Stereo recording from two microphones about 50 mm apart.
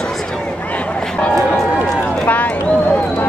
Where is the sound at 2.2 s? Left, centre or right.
Left.